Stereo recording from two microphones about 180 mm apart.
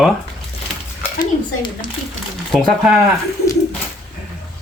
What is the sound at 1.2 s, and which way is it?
Dishes, 25° left (ahead or behind).